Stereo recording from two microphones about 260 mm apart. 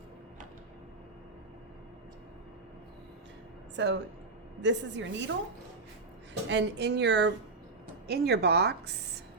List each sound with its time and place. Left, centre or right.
3.8 s a woman's voice: right
6.5 s a woman's voice: right